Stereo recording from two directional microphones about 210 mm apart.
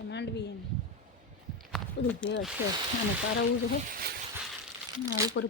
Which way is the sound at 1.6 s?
5° left (ahead or behind).